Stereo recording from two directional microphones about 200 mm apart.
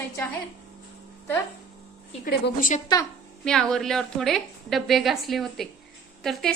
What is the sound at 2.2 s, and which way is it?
Speech, 45° left (ahead or behind).